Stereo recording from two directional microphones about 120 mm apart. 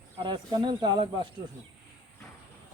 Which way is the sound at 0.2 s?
40° right (ahead or behind).